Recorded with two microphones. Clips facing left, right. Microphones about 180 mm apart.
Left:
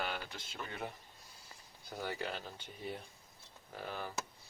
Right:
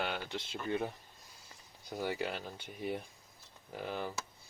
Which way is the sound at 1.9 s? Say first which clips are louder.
Right 4 dB; 10° right (ahead or behind).